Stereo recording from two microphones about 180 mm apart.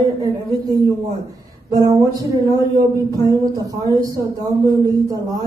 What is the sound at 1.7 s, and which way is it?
Speech, 20° right (ahead or behind).